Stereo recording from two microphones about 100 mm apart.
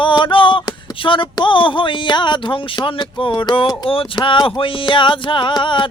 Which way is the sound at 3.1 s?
55° left (ahead or behind).